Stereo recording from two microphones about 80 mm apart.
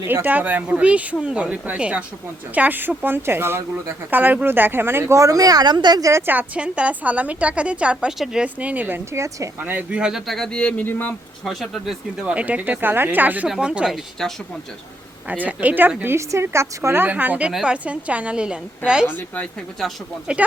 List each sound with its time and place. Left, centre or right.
0.0 s a woman's voice: right
6.0 s a woman's voice: right
6.2 s a woman's voice: centre
8.5 s speech: centre
9.1 s a woman's voice: right
9.6 s speech: right; by 10.8 s centre
10.8 s speech: left
11.4 s speech: centre
12.2 s a woman's voice: centre
15.3 s speech: centre
16.0 s a woman's voice: right
17.1 s a woman's voice: right
19.0 s speech: left
19.8 s speech: centre